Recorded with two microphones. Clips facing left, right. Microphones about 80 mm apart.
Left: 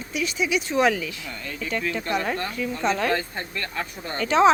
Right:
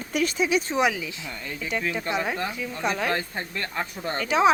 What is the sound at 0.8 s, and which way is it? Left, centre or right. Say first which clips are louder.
Speech: left 3 dB; centre.